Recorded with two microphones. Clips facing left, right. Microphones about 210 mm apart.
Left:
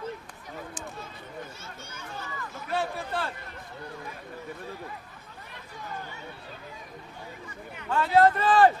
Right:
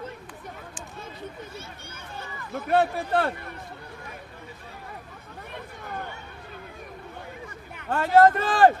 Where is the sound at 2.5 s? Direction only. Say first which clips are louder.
Right 9 dB; 55° right (ahead or behind).